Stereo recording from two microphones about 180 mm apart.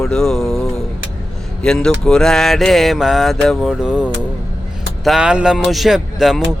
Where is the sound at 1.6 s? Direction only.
5° left (ahead or behind).